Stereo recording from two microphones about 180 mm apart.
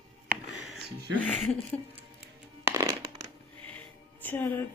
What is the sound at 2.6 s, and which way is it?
Music, 15° right (ahead or behind).